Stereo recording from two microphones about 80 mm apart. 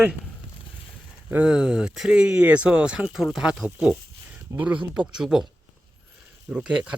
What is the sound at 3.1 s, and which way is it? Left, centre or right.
Speech, centre.